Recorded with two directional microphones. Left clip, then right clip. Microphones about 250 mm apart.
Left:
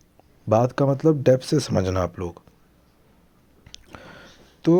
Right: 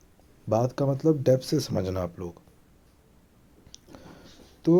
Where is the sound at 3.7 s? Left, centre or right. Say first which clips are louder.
Left 6 dB; left.